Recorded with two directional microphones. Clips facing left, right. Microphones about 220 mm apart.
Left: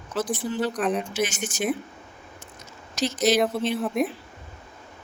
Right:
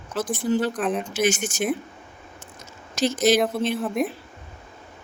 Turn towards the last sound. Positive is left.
turn(degrees=0)  # may be behind; listen again after turning